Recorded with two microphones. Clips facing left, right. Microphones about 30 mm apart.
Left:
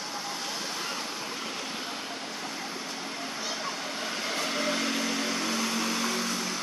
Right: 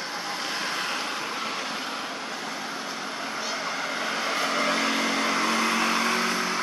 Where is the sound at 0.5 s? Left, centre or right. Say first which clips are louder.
Right 5 dB; right.